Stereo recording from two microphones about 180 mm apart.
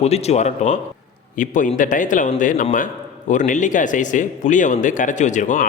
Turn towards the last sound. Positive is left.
turn(degrees=45)  # may be behind; listen again after turning